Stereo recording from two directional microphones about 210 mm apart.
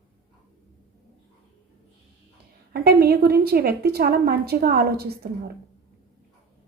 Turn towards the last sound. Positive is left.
turn(degrees=-45)  # may be behind; listen again after turning